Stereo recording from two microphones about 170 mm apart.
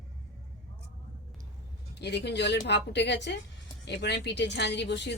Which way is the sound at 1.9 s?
85° left.